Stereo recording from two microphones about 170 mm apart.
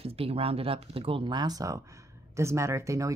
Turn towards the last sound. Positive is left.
turn(degrees=-20)  # may be behind; listen again after turning